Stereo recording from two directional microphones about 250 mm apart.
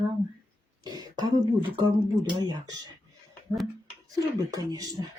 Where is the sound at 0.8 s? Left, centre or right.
Centre.